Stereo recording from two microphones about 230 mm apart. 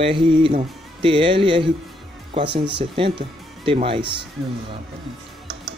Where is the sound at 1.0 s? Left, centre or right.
Right.